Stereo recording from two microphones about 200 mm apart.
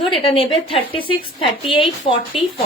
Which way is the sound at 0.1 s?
25° left (ahead or behind).